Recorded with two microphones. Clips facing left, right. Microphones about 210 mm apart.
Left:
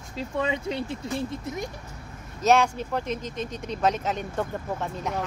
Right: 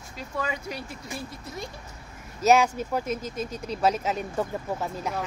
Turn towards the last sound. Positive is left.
turn(degrees=-5)  # may be behind; listen again after turning